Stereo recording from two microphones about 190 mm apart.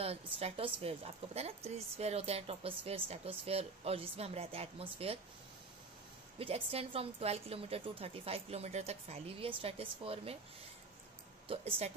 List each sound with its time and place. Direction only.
0.0 s a woman's voice: 30° right (ahead or behind)
6.3 s a woman's voice: 30° right (ahead or behind)
11.4 s speech: 30° right (ahead or behind)